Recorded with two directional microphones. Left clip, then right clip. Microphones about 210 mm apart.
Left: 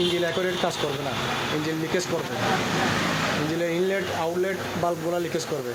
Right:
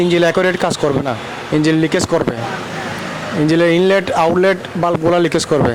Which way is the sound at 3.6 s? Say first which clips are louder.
Right 15 dB; 50° right (ahead or behind).